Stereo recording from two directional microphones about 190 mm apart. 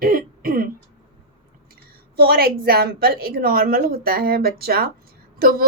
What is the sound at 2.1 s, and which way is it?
A child's voice, 55° right (ahead or behind).